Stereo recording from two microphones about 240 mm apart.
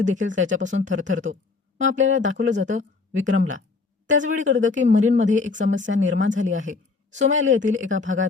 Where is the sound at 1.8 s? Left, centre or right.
Right.